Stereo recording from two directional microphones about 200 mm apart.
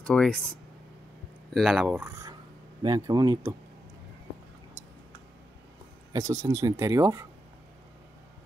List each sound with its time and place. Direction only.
0.0 s speech: 5° left (ahead or behind); by 3.5 s 20° right (ahead or behind)
6.1 s speech: 15° right (ahead or behind)